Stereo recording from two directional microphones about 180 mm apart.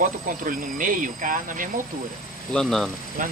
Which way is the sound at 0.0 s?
50° right (ahead or behind).